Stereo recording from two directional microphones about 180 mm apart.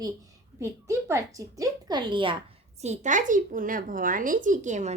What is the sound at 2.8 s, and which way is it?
Speech, 40° right (ahead or behind).